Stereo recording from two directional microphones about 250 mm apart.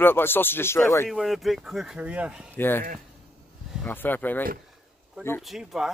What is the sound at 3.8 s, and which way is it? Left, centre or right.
Speech, centre.